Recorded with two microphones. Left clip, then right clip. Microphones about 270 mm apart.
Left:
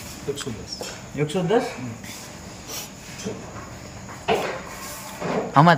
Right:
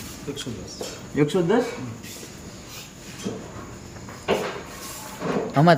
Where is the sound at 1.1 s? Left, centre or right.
Right.